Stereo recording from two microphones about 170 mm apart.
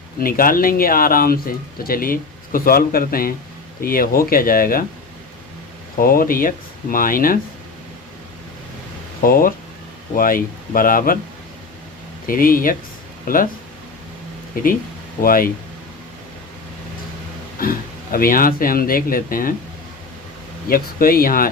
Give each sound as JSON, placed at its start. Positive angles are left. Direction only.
{"t": 0.2, "sound": "speech", "side_deg": 55}
{"t": 6.0, "sound": "speech", "side_deg": 55}
{"t": 9.2, "sound": "speech", "side_deg": 55}
{"t": 12.2, "sound": "speech", "side_deg": 55}
{"t": 14.5, "sound": "speech", "side_deg": 55}
{"t": 17.6, "sound": "speech", "side_deg": 55}
{"t": 20.7, "sound": "speech", "side_deg": 60}